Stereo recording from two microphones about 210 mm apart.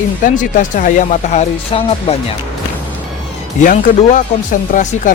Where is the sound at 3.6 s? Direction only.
35° left (ahead or behind).